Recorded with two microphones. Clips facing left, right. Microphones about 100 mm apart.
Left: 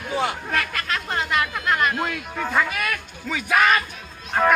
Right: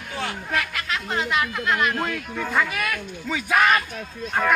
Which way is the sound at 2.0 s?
10° left (ahead or behind).